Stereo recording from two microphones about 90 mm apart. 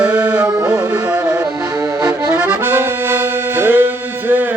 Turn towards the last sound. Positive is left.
turn(degrees=-20)  # may be behind; listen again after turning